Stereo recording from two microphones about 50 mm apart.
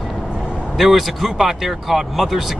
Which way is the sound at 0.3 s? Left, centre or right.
Centre.